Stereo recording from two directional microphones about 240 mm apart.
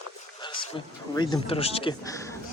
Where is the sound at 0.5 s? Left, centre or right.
Centre.